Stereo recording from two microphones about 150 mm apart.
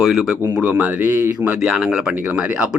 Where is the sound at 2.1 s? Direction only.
15° right (ahead or behind).